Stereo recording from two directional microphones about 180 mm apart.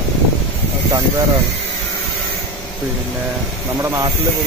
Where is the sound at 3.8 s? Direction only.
15° right (ahead or behind).